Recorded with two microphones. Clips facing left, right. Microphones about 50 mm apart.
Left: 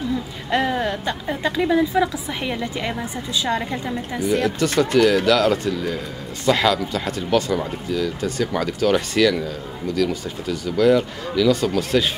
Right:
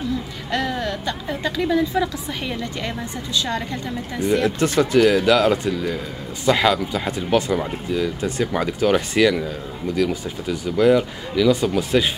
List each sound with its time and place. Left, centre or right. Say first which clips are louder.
0.5 s a woman's voice: left 3 dB; left
4.3 s speech: right 1 dB; right
4.9 s speech: right 1 dB; centre
10.5 s speech: even; right